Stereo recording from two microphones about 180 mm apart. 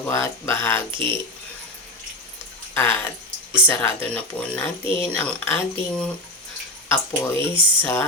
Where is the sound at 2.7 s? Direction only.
10° left (ahead or behind).